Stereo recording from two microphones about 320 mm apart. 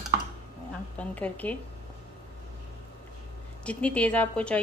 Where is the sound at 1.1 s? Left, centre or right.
Centre.